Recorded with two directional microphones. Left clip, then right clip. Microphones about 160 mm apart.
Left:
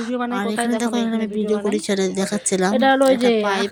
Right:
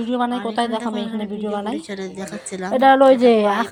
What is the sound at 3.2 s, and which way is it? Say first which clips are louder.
Speech: right 4 dB; 5° left (ahead or behind).